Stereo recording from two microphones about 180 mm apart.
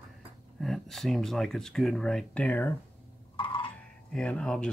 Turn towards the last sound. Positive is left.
turn(degrees=5)  # may be behind; listen again after turning